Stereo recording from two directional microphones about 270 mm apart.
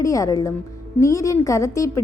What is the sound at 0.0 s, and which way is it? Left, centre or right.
A woman's voice, centre.